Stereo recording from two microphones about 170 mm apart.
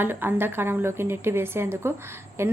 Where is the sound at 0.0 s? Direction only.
10° right (ahead or behind).